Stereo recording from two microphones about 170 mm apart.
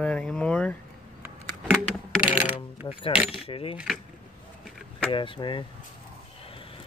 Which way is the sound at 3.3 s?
35° left (ahead or behind).